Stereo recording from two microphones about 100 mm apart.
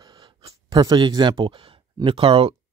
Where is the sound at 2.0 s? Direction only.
65° right (ahead or behind).